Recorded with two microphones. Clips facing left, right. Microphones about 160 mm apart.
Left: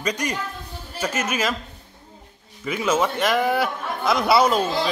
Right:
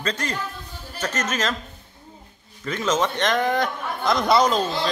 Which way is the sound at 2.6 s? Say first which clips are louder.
Left 1 dB; 10° left (ahead or behind).